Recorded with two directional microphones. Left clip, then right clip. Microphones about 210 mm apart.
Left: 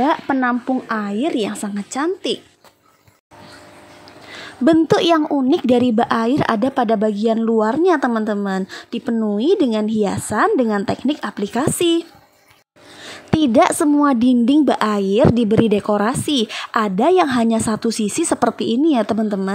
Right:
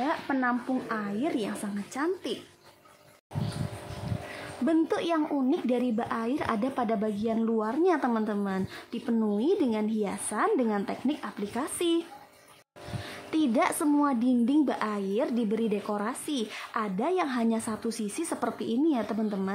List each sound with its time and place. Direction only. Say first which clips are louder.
0.0 s speech: left 11 dB; 40° left (ahead or behind)
4.8 s speech: left 13 dB; 35° left (ahead or behind)
13.3 s speech: left 12 dB; 35° left (ahead or behind)